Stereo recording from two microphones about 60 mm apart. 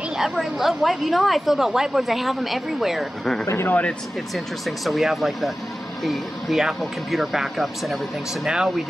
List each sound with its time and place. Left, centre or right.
0.2 s a woman's voice: centre
3.4 s speech: left
4.6 s a woman's voice: centre
8.5 s speech: centre